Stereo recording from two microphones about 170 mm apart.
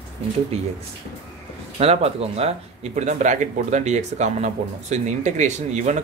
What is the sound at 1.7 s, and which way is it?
Speech, 35° right (ahead or behind).